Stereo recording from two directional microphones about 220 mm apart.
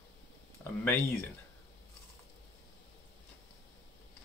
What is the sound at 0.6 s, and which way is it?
Speech, 10° left (ahead or behind).